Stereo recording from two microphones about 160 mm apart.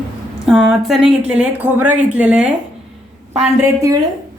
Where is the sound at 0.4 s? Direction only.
5° right (ahead or behind).